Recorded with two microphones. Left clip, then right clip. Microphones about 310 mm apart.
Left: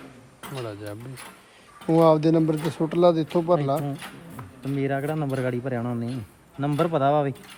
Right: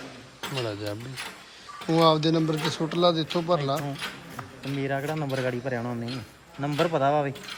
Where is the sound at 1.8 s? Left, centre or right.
Centre.